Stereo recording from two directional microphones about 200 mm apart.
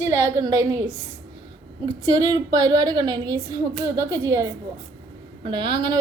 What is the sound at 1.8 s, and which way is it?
A woman's voice, 20° right (ahead or behind).